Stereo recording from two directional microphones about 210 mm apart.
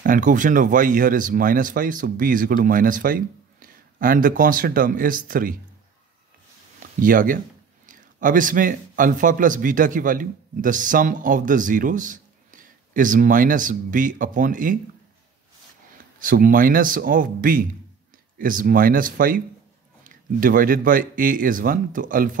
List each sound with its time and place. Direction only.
0.0 s speech: 40° right (ahead or behind)
6.8 s speech: 40° right (ahead or behind)
16.2 s speech: 40° right (ahead or behind)